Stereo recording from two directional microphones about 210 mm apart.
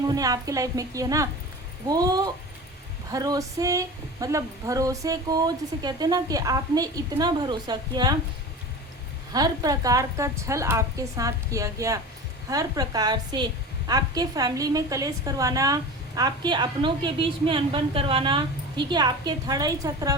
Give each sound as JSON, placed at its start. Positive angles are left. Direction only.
{"t": 0.1, "sound": "speech", "side_deg": -15}
{"t": 9.3, "sound": "a woman's voice", "side_deg": -15}